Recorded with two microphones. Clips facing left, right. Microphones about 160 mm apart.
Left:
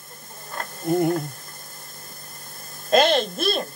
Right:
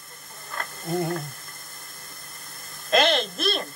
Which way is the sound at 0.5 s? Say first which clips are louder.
Left 5 dB; 25° left (ahead or behind).